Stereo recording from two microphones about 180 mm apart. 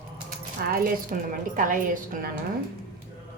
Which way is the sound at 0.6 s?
55° right (ahead or behind).